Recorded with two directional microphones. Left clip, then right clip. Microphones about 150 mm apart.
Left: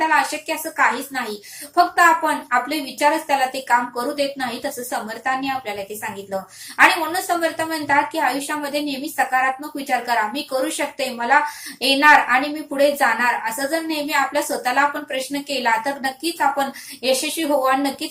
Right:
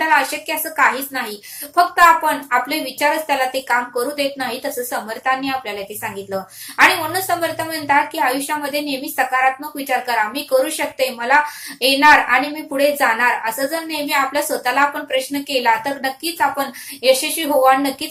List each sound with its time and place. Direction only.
0.1 s a woman's voice: 20° right (ahead or behind)
2.2 s a woman's voice: 20° right (ahead or behind)